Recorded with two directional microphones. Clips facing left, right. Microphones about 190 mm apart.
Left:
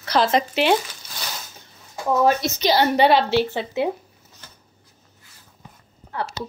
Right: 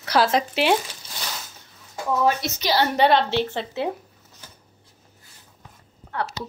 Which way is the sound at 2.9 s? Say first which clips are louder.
Left 2 dB; 5° left (ahead or behind).